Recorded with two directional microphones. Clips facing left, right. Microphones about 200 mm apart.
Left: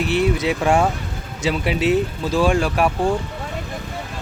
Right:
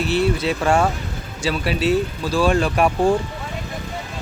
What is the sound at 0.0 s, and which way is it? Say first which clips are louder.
Speech: even; 15° left (ahead or behind).